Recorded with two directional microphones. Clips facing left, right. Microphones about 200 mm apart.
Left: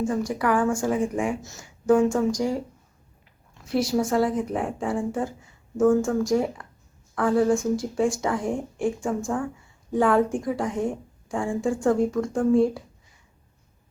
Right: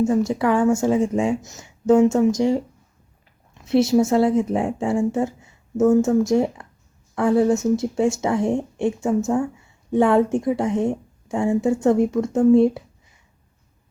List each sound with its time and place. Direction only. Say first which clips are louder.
0.0 s speech: right 6 dB; 25° right (ahead or behind)